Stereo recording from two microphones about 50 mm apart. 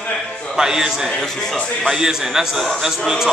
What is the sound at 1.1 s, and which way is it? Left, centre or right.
Speech, centre.